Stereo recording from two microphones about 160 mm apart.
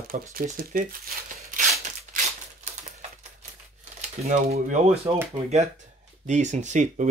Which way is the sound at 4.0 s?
45° right (ahead or behind).